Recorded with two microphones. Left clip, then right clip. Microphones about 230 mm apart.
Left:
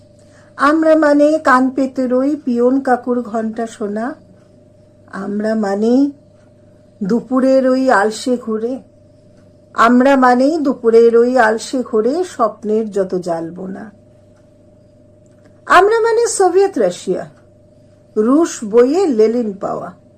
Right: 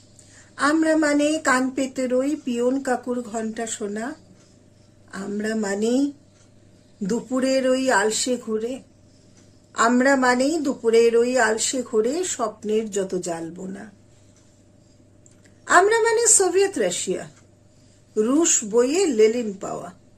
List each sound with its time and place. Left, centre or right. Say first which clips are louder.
0.6 s a man's voice: left 9 dB; right
5.1 s a man's voice: left 8 dB; right
15.6 s a man's voice: left 7 dB; right